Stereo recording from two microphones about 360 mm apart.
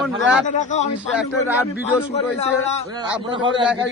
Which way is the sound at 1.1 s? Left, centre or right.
Centre.